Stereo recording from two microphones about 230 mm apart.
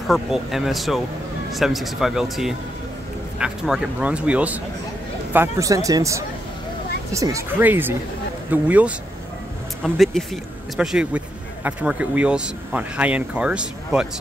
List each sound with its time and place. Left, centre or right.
0.1 s a man's voice: centre